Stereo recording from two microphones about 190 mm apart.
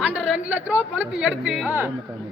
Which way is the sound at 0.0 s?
5° right (ahead or behind).